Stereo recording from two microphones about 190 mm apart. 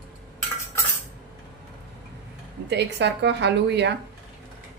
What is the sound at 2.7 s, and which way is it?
A woman's voice, 65° right (ahead or behind).